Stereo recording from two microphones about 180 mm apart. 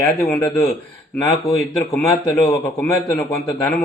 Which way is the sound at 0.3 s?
20° left (ahead or behind).